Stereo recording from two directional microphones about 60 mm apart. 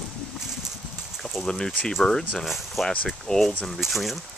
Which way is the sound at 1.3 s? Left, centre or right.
Centre.